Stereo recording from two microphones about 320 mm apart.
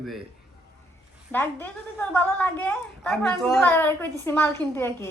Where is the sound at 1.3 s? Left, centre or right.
Centre.